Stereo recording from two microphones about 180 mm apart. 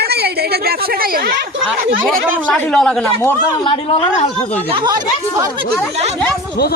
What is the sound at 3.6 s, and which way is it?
Speech, 30° left (ahead or behind).